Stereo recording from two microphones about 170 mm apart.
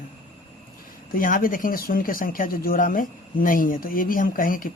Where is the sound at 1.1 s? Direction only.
55° left (ahead or behind).